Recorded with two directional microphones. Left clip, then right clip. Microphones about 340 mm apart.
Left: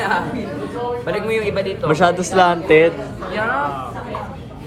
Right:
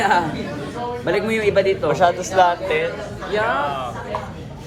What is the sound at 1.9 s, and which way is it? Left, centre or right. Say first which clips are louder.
Speech: left 5 dB; left.